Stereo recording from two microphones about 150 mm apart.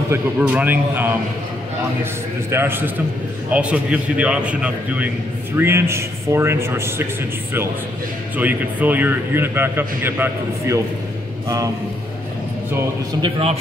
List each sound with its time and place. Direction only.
0.1 s speech: 10° right (ahead or behind)
2.5 s speech: 15° right (ahead or behind)
8.4 s a man's voice: 10° right (ahead or behind)
13.2 s a man's voice: 40° right (ahead or behind)